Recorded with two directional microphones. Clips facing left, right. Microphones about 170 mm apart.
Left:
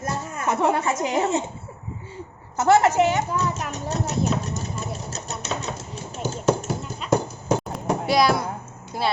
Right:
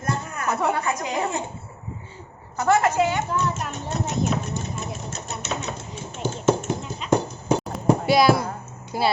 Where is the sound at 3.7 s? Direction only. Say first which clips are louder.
Left 1 dB; 40° left (ahead or behind).